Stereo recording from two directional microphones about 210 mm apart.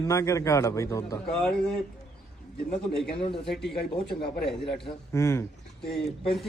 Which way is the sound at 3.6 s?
50° left (ahead or behind).